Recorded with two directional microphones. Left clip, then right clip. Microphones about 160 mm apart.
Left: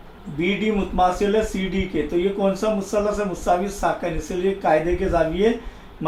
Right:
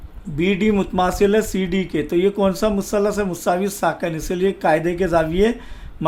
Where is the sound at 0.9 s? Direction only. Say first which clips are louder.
Right 1 dB; 60° right (ahead or behind).